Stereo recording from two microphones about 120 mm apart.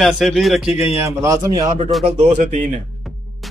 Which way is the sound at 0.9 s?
25° right (ahead or behind).